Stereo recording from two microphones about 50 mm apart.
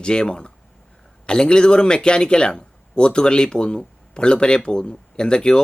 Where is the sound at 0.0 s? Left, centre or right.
Centre.